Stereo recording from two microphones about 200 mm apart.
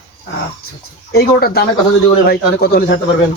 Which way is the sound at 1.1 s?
50° left (ahead or behind).